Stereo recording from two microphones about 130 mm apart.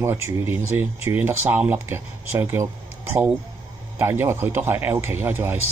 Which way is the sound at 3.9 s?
15° right (ahead or behind).